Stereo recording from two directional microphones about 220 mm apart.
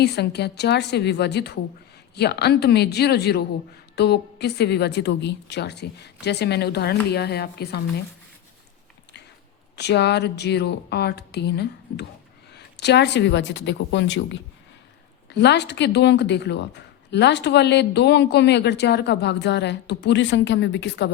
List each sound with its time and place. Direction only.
0.0 s speech: 50° left (ahead or behind)
9.7 s speech: 50° left (ahead or behind)